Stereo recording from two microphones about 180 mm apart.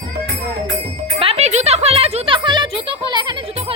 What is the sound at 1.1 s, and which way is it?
Music, 35° right (ahead or behind).